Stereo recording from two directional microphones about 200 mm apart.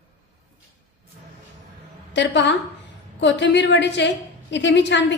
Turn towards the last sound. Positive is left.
turn(degrees=60)  # may be behind; listen again after turning